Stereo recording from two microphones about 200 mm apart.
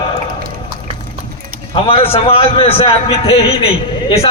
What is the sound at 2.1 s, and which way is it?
A man's voice, 30° left (ahead or behind).